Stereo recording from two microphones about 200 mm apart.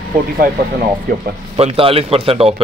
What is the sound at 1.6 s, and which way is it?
Speech, 30° right (ahead or behind).